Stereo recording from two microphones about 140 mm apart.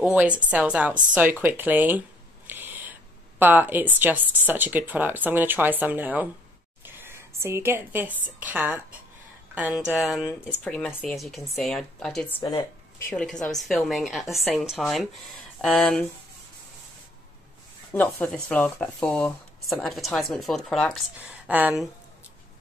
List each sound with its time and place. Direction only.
0.0 s a woman's voice: 10° right (ahead or behind)
10.6 s speech: 10° left (ahead or behind)
11.1 s speech: centre (ahead or behind)
12.4 s speech: 25° left (ahead or behind)
13.1 s speech: 5° left (ahead or behind)
17.9 s speech: 10° left (ahead or behind)
21.5 s speech: 10° right (ahead or behind)